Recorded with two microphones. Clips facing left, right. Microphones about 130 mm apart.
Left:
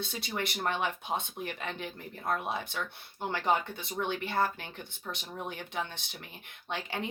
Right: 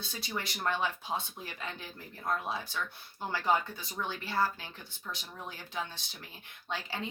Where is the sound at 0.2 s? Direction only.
60° left (ahead or behind).